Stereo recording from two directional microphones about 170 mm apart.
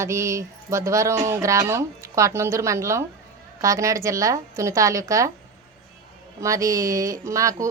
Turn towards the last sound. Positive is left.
turn(degrees=-20)  # may be behind; listen again after turning